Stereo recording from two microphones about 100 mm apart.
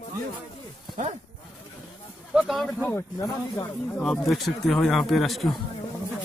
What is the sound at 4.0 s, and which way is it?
A man's voice, centre (ahead or behind).